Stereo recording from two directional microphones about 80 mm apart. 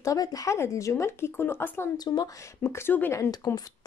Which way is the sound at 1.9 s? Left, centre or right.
Left.